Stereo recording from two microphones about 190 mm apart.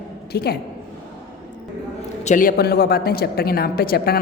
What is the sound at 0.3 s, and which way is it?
Speech, 60° left (ahead or behind).